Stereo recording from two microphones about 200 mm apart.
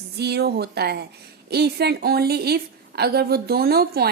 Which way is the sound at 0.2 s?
55° right (ahead or behind).